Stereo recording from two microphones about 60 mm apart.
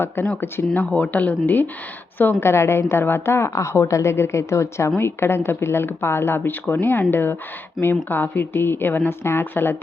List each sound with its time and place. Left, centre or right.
0.3 s a woman's voice: left
0.9 s a woman's voice: left
2.1 s a woman's voice: left
7.8 s speech: centre
8.1 s a woman's voice: left